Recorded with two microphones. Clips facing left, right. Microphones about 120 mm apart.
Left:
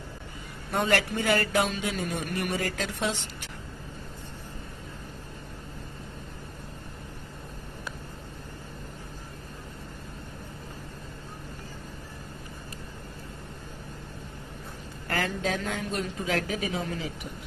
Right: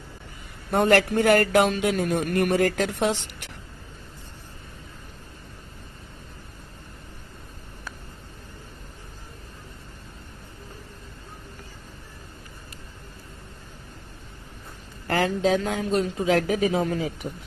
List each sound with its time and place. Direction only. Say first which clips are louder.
0.7 s speech: right 7 dB; 50° right (ahead or behind)
15.0 s a sound: right 6 dB; 40° right (ahead or behind)
15.4 s speech: right 7 dB; 40° right (ahead or behind)